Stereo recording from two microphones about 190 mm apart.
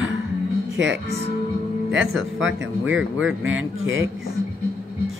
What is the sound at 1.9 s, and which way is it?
Speech, 75° right (ahead or behind).